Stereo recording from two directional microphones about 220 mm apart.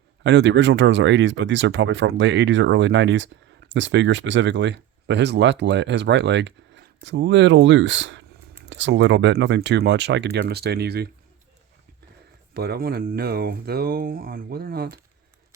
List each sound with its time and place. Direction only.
0.2 s speech: 50° right (ahead or behind)
12.5 s speech: 45° right (ahead or behind)